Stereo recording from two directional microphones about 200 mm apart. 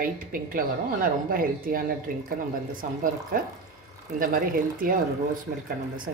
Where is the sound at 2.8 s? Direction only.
40° right (ahead or behind).